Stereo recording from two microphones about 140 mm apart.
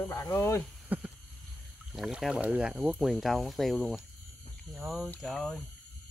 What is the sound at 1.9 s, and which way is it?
Speech, centre (ahead or behind).